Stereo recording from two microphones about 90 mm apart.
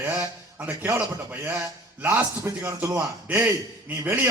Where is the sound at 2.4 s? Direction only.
30° right (ahead or behind).